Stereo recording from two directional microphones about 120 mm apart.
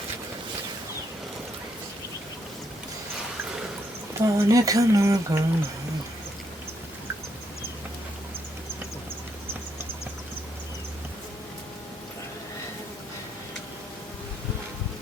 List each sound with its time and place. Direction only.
4.2 s speech: 30° right (ahead or behind)